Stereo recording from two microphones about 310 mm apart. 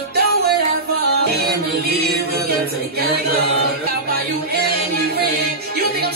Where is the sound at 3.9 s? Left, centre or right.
Right.